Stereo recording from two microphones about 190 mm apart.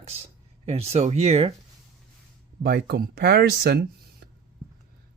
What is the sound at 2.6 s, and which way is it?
Speech, 55° right (ahead or behind).